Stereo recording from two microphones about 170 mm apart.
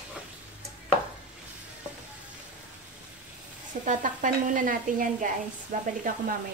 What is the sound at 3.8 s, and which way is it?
Speech, 50° right (ahead or behind).